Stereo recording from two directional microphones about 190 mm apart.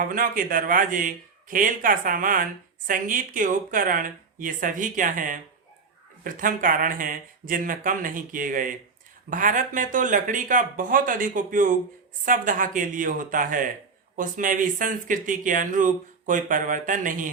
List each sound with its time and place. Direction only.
0.0 s a man's voice: 45° right (ahead or behind)